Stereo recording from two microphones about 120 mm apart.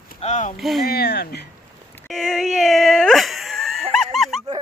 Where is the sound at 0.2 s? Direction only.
90° left.